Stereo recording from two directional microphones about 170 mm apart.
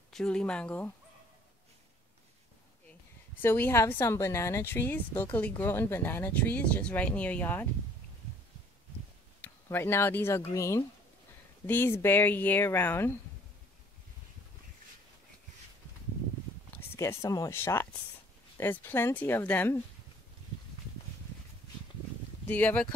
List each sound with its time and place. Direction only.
0.1 s speech: 5° left (ahead or behind)
3.3 s a woman's voice: 10° left (ahead or behind)
9.4 s a woman's voice: 15° left (ahead or behind)
16.7 s a woman's voice: 15° left (ahead or behind)
22.5 s a woman's voice: 10° left (ahead or behind)